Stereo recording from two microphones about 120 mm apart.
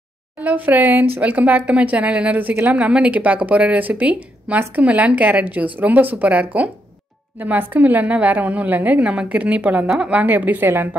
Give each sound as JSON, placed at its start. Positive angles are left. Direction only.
{"t": 0.4, "sound": "a woman's voice", "side_deg": -15}